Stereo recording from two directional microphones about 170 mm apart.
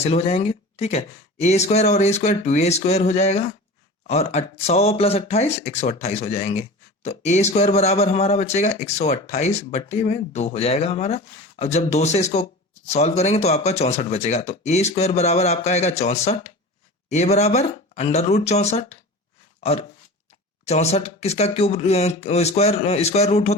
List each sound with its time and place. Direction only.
0.0 s speech: 35° left (ahead or behind)
20.7 s speech: 40° left (ahead or behind)